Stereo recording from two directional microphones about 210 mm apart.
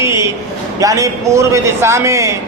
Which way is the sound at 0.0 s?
15° right (ahead or behind).